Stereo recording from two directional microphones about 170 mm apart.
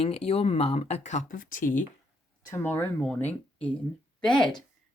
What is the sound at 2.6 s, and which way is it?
Speech, 10° left (ahead or behind).